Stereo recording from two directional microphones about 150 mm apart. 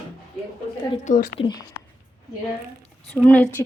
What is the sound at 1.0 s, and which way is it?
Speech, 60° left (ahead or behind).